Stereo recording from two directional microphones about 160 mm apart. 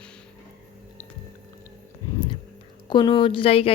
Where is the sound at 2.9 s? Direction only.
30° left (ahead or behind).